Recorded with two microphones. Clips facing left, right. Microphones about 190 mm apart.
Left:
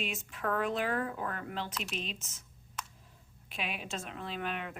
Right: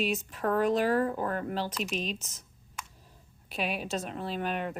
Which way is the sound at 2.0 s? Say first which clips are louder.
Right 6 dB; 40° right (ahead or behind).